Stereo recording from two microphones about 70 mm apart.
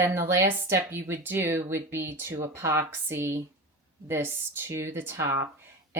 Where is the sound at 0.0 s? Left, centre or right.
Right.